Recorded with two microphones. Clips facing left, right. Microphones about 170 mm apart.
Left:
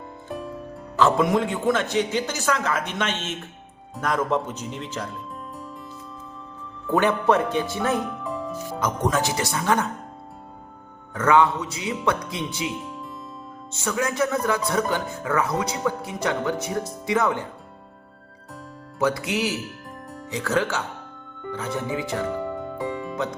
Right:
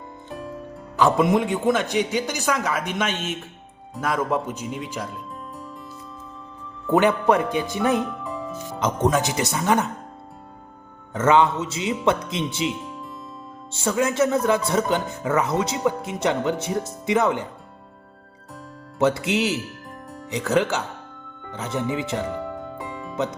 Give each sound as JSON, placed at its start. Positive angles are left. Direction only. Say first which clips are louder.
{"t": 0.3, "sound": "music", "louder": "even", "side_deg": 0}
{"t": 0.9, "sound": "a man's voice", "louder": "right 1 dB", "side_deg": -15}
{"t": 6.9, "sound": "a man's voice", "louder": "right 2 dB", "side_deg": -15}
{"t": 8.2, "sound": "music", "louder": "left 1 dB", "side_deg": 0}
{"t": 9.0, "sound": "speech", "louder": "right 3 dB", "side_deg": -20}
{"t": 11.1, "sound": "speech", "louder": "right 1 dB", "side_deg": -25}
{"t": 12.7, "sound": "music", "louder": "left 1 dB", "side_deg": 0}
{"t": 13.7, "sound": "speech", "louder": "right 3 dB", "side_deg": -25}
{"t": 18.9, "sound": "speech", "louder": "right 3 dB", "side_deg": -25}
{"t": 22.4, "sound": "music", "louder": "left 3 dB", "side_deg": 0}